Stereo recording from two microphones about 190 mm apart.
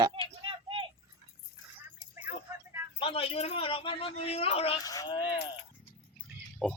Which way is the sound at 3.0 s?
30° left (ahead or behind).